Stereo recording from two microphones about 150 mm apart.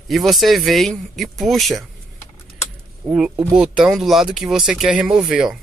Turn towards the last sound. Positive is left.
turn(degrees=-5)  # may be behind; listen again after turning